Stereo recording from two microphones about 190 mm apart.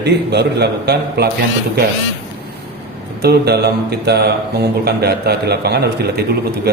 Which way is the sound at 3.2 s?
60° right (ahead or behind).